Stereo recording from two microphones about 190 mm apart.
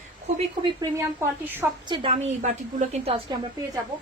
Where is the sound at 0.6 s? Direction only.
20° right (ahead or behind).